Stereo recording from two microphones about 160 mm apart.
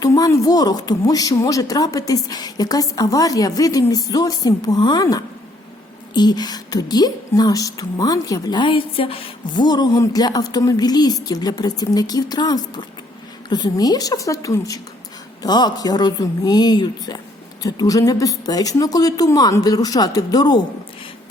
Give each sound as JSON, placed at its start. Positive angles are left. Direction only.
{"t": 0.0, "sound": "speech", "side_deg": 20}